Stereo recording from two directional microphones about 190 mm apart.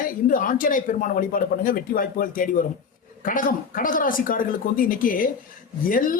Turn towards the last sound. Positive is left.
turn(degrees=45)  # may be behind; listen again after turning